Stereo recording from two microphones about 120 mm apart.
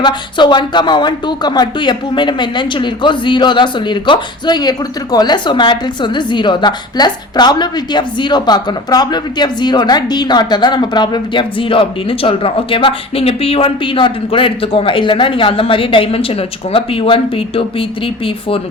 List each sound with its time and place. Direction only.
0.0 s a woman's voice: 40° left (ahead or behind)